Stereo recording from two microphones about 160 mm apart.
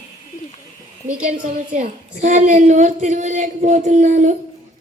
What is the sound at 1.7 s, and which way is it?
Speech, 50° right (ahead or behind).